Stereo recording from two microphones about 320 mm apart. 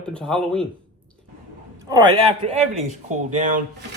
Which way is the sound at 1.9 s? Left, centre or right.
Centre.